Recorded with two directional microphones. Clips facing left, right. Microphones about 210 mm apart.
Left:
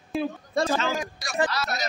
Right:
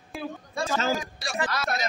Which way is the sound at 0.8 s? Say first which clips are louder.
Right 1 dB; 35° right (ahead or behind).